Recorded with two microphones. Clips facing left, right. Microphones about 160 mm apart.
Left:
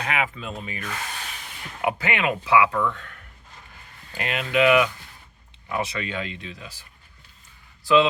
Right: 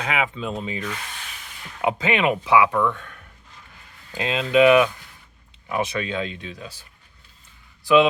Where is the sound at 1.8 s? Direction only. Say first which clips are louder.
Right 4 dB; 20° right (ahead or behind).